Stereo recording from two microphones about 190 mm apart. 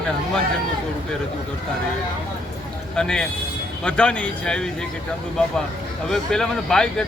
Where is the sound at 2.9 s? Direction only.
5° left (ahead or behind).